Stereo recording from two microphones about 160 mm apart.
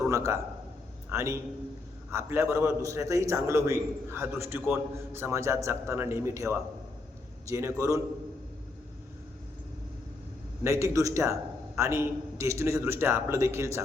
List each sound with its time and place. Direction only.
0.1 s a man's voice: 20° right (ahead or behind)
10.6 s a man's voice: 20° right (ahead or behind)